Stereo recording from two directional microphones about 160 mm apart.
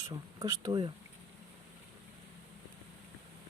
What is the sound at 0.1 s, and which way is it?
Speech, 25° right (ahead or behind).